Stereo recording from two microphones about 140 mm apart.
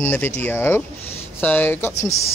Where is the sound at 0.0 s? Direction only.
15° left (ahead or behind).